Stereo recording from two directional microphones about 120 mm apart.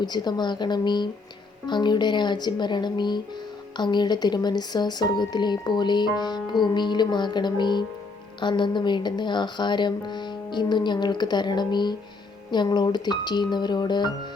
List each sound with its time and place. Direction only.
0.0 s speech: 35° left (ahead or behind)